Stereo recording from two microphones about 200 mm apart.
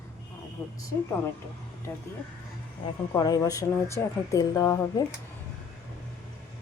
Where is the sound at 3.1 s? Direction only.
20° left (ahead or behind).